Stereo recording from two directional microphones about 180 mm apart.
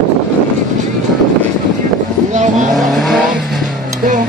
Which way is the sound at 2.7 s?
Centre (ahead or behind).